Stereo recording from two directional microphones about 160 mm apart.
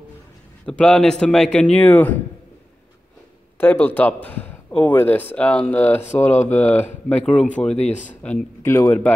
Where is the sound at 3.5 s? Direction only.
10° left (ahead or behind).